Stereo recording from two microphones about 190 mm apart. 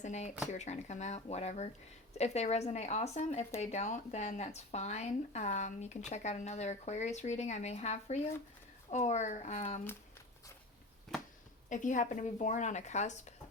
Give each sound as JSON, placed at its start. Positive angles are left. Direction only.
{"t": 0.0, "sound": "speech", "side_deg": 40}
{"t": 11.7, "sound": "speech", "side_deg": 40}